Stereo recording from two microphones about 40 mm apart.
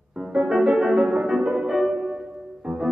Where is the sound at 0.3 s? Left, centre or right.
Centre.